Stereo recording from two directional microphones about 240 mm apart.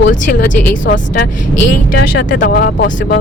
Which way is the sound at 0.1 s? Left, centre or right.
Left.